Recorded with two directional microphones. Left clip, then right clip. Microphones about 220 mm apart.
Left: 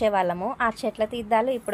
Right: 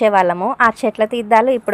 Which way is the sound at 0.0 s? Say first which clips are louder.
Right 9 dB; 20° right (ahead or behind).